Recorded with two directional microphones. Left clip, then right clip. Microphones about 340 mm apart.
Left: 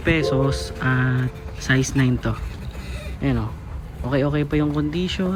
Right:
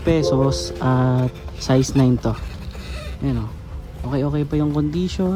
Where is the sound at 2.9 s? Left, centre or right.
Centre.